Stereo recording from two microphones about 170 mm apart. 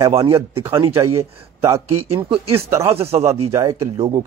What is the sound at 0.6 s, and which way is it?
Speech, 15° right (ahead or behind).